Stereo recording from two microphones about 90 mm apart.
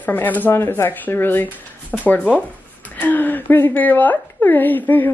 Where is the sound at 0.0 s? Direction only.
20° left (ahead or behind).